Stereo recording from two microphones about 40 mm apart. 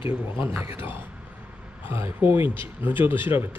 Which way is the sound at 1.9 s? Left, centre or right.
Right.